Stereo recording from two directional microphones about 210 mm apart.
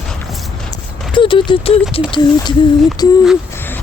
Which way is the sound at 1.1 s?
25° left (ahead or behind).